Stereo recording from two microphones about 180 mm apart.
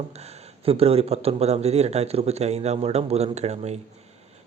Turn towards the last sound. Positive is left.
turn(degrees=-40)  # may be behind; listen again after turning